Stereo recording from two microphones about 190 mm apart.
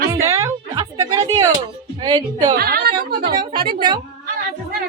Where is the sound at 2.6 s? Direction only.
55° right (ahead or behind).